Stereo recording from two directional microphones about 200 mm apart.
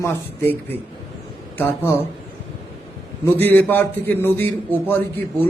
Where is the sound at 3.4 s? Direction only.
10° left (ahead or behind).